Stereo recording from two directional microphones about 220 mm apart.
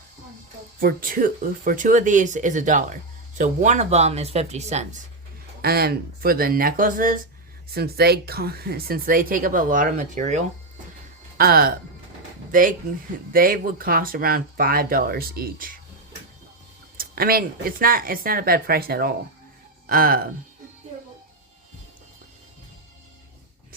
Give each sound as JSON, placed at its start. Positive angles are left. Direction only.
{"t": 0.8, "sound": "speech", "side_deg": -40}
{"t": 5.6, "sound": "speech", "side_deg": -45}
{"t": 17.0, "sound": "speech", "side_deg": -40}